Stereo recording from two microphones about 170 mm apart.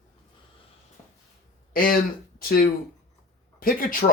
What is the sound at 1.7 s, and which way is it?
Speech, 60° left (ahead or behind).